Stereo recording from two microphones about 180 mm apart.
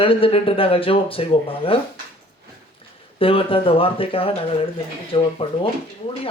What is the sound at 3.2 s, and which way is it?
Speech, 30° left (ahead or behind).